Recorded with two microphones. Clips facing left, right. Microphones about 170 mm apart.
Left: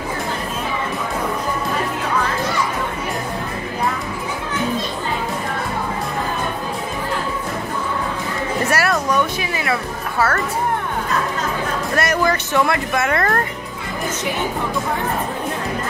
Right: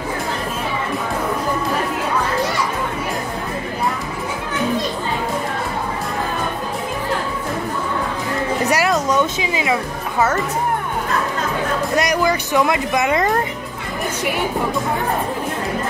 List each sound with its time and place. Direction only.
8.6 s music: 15° right (ahead or behind)
11.9 s speech: 15° right (ahead or behind)